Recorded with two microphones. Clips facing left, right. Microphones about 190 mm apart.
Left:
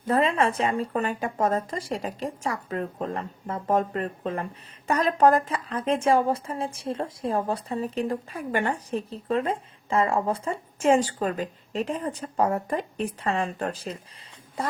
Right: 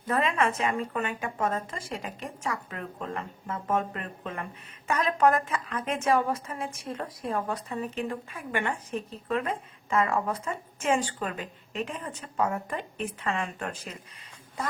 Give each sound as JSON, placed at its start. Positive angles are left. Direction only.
{"t": 0.1, "sound": "speech", "side_deg": 35}